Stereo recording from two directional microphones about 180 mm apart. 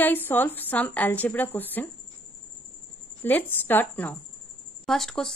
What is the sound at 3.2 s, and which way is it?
A woman's voice, 10° left (ahead or behind).